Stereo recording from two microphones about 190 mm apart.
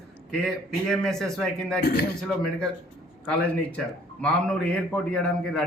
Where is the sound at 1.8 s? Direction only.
55° left (ahead or behind).